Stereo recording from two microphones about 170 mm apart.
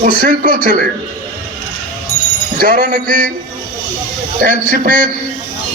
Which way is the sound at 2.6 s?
60° right (ahead or behind).